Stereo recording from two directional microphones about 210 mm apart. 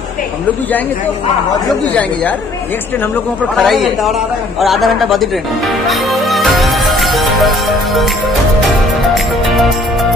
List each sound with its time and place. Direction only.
3.5 s speech: centre (ahead or behind)
5.9 s music: centre (ahead or behind)
9.1 s music: centre (ahead or behind)